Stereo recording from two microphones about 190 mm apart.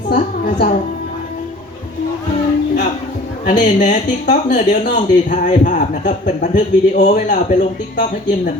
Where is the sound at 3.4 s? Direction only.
40° left (ahead or behind).